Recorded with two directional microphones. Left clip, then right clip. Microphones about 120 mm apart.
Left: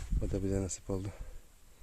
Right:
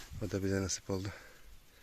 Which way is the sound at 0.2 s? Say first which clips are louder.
Even; 20° left (ahead or behind).